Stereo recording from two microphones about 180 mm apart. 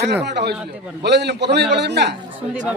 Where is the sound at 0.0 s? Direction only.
70° right (ahead or behind).